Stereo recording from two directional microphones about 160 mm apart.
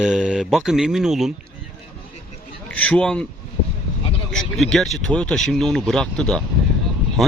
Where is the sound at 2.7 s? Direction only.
10° left (ahead or behind).